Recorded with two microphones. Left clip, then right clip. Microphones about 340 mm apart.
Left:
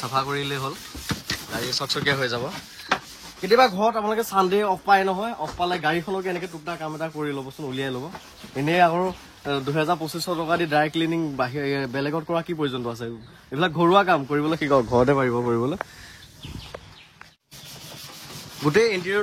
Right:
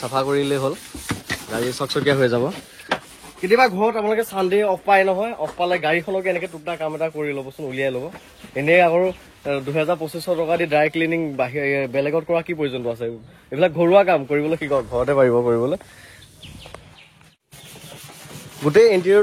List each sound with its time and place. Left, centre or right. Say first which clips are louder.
0.0 s speech: right 5 dB; centre
3.4 s speech: right 2 dB; centre
15.1 s speech: right 7 dB; centre
18.6 s speech: right 6 dB; centre